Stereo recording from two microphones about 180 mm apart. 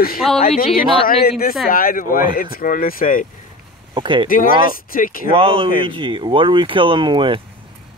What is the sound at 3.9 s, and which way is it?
Speech, 25° right (ahead or behind).